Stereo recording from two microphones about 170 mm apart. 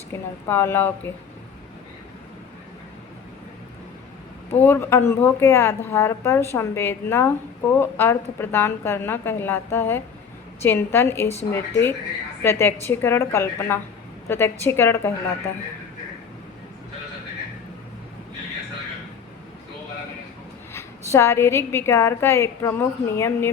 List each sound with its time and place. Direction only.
0.1 s speech: 15° left (ahead or behind)
4.5 s speech: 10° left (ahead or behind)
20.7 s speech: 15° left (ahead or behind)